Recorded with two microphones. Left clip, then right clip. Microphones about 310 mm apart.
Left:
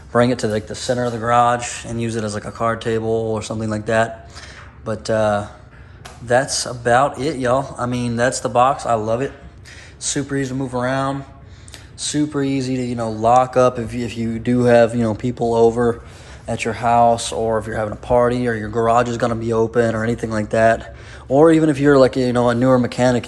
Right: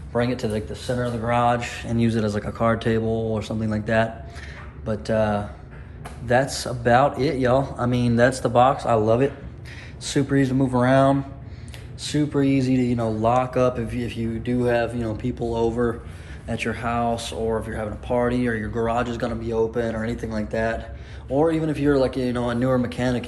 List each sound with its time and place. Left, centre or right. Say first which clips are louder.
0.1 s speech: left 7 dB; centre